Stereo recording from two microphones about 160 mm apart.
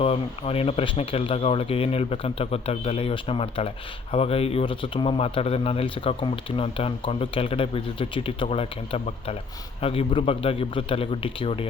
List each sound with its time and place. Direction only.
0.0 s speech: 35° left (ahead or behind)